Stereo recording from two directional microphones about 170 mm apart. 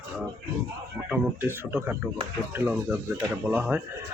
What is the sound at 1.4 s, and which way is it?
Speech, 10° right (ahead or behind).